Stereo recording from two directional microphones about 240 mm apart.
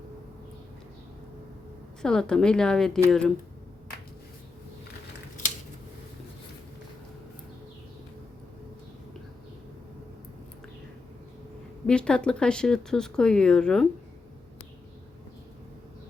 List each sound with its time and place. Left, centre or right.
2.0 s speech: centre
11.9 s speech: centre